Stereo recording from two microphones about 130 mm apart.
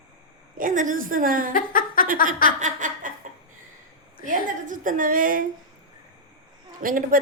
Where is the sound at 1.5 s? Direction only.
90° left.